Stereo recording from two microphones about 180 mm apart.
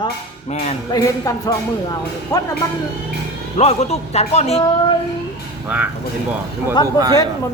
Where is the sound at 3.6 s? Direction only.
35° left (ahead or behind).